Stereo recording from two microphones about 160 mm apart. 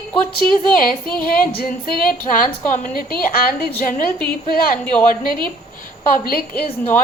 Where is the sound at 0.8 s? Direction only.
65° left (ahead or behind).